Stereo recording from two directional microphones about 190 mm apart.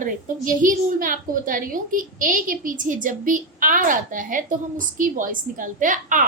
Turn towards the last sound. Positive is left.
turn(degrees=-45)  # may be behind; listen again after turning